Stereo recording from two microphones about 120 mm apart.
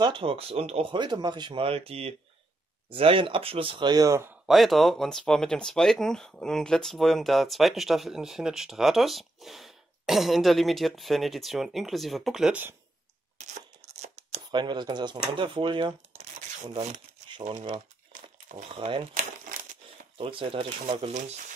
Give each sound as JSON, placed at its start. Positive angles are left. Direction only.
{"t": 0.0, "sound": "speech", "side_deg": -45}
{"t": 0.9, "sound": "speech", "side_deg": -40}
{"t": 4.5, "sound": "speech", "side_deg": 0}
{"t": 13.4, "sound": "a sound", "side_deg": -70}
{"t": 14.5, "sound": "speech", "side_deg": -40}
{"t": 16.8, "sound": "shuffling cards", "side_deg": -80}
{"t": 18.7, "sound": "speech", "side_deg": -50}
{"t": 20.2, "sound": "speech", "side_deg": -50}